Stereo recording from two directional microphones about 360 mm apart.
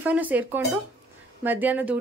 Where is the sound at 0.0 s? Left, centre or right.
Centre.